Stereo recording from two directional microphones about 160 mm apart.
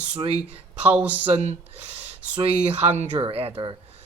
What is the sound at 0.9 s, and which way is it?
Speech, 10° right (ahead or behind).